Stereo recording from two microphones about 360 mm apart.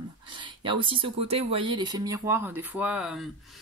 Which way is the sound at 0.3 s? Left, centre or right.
Centre.